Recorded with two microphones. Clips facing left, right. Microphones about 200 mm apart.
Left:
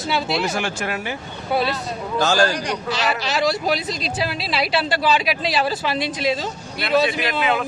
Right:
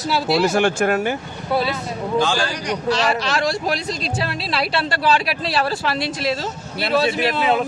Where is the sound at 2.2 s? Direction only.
45° left (ahead or behind).